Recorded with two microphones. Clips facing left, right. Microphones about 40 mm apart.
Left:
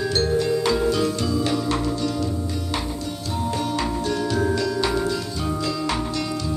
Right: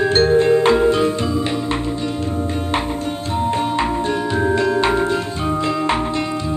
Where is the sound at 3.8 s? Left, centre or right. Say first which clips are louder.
Right 5 dB; right.